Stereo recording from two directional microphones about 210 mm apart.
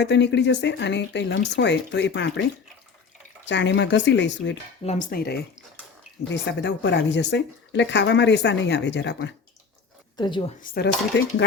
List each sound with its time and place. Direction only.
0.0 s speech: 55° left (ahead or behind)
4.8 s speech: 35° left (ahead or behind); by 9.3 s 55° left (ahead or behind)
10.2 s a woman's voice: 20° left (ahead or behind)
10.6 s speech: 50° left (ahead or behind)